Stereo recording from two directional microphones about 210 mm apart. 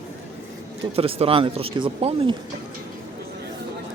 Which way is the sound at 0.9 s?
25° right (ahead or behind).